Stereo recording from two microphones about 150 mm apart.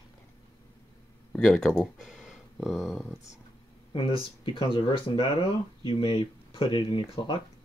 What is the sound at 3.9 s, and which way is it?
Speech, 35° left (ahead or behind).